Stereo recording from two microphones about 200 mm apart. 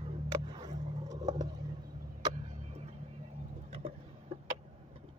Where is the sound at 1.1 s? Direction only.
20° right (ahead or behind).